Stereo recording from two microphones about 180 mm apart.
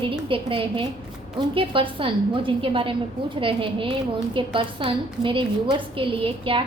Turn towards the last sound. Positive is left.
turn(degrees=-30)  # may be behind; listen again after turning